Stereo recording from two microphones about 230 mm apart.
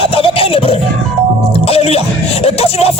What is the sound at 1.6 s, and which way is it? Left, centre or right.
Music, left.